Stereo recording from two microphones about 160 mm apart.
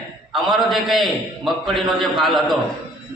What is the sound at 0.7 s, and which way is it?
A man's voice, centre (ahead or behind).